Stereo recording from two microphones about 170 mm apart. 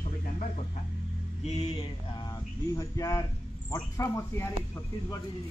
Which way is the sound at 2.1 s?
25° left (ahead or behind).